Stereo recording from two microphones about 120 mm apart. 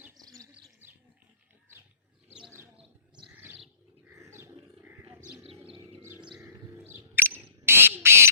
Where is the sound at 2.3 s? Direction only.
5° right (ahead or behind).